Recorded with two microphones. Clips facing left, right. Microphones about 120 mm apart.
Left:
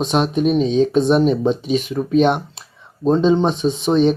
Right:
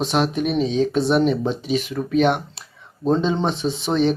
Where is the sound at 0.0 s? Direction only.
20° left (ahead or behind).